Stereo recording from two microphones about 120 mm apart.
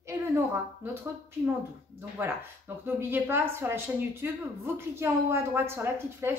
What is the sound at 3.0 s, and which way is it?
A woman's voice, 20° right (ahead or behind).